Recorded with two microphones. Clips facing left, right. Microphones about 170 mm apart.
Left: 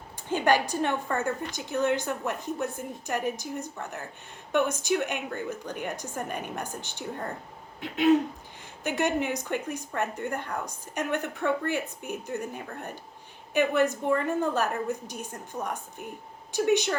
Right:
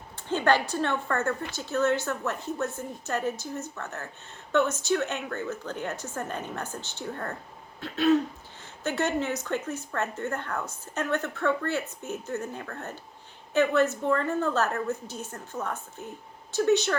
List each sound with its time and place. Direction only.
0.2 s a woman's voice: 10° left (ahead or behind)